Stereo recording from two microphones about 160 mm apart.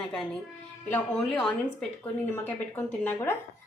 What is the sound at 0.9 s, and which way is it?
A woman's voice, 10° left (ahead or behind).